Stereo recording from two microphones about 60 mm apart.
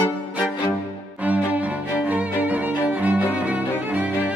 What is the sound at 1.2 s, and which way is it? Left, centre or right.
Music, right.